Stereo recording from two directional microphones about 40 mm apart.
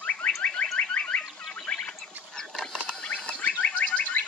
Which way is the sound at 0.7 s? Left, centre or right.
Left.